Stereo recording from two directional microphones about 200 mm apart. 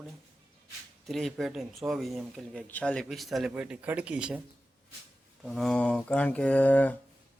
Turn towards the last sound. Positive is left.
turn(degrees=10)  # may be behind; listen again after turning